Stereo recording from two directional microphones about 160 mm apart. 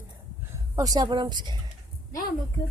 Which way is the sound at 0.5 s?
20° right (ahead or behind).